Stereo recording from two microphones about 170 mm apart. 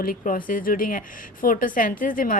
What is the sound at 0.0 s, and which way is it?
A woman's voice, 55° left (ahead or behind).